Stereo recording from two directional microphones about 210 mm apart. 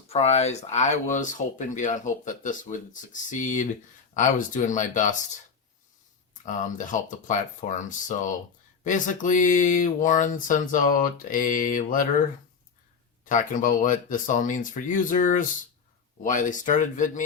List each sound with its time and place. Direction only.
0.1 s speech: 30° left (ahead or behind)
6.4 s speech: 35° left (ahead or behind)
13.2 s speech: 40° left (ahead or behind)